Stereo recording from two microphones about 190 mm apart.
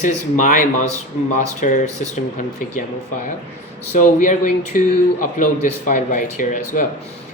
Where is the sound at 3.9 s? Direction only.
40° left (ahead or behind).